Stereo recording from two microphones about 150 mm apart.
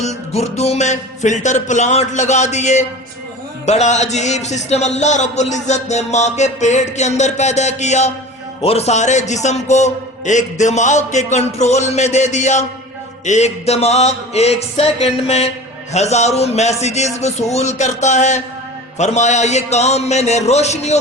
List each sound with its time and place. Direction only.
0.0 s a man's voice: 45° left (ahead or behind)